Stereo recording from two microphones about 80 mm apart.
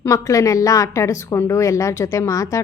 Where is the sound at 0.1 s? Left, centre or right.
Left.